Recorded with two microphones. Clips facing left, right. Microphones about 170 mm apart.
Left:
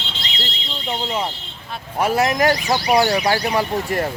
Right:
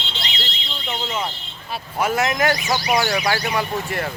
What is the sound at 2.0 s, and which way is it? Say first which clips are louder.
A man's voice: left 3 dB; 35° left (ahead or behind).